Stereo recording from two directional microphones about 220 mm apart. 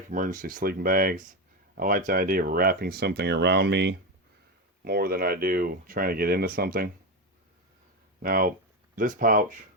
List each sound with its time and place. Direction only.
0.1 s speech: 35° right (ahead or behind)
8.2 s speech: 40° right (ahead or behind)